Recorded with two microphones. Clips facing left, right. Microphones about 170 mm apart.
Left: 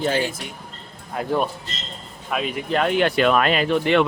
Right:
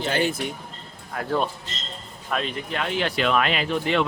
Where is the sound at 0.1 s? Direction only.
60° right (ahead or behind).